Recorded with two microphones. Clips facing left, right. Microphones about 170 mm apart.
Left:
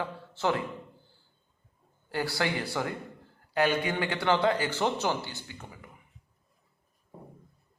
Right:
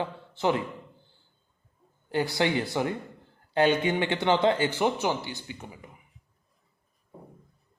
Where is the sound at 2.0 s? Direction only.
20° right (ahead or behind).